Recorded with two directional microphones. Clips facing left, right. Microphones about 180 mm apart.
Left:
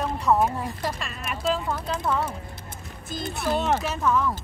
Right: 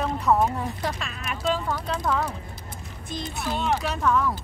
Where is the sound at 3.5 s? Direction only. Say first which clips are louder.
Left 2 dB; 45° left (ahead or behind).